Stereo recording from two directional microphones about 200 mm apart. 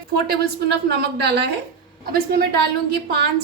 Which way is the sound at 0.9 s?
55° right (ahead or behind).